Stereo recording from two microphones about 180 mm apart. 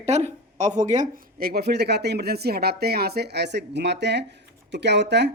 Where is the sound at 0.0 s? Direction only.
40° right (ahead or behind).